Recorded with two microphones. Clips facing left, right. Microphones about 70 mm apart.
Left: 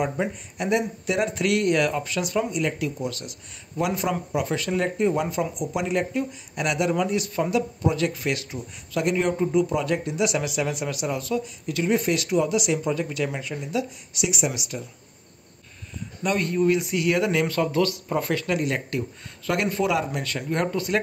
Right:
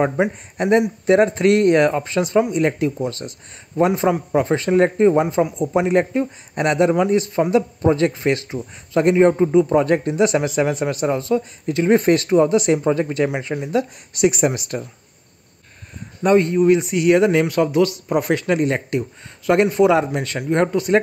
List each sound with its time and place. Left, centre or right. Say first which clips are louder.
0.6 s a man's voice: right 8 dB; right
16.2 s a man's voice: right 8 dB; right